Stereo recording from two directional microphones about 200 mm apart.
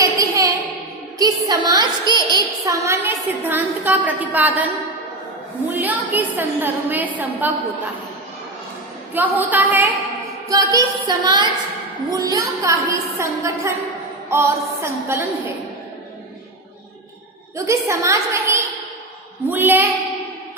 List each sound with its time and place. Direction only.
0.0 s a sound: 15° right (ahead or behind)
1.2 s a woman's voice: 20° right (ahead or behind)
5.7 s a woman's voice: 10° right (ahead or behind)
9.1 s a woman's voice: 10° right (ahead or behind)
10.5 s music: 15° right (ahead or behind)
12.1 s a woman's voice: 15° right (ahead or behind)
17.7 s a woman's voice: 15° right (ahead or behind)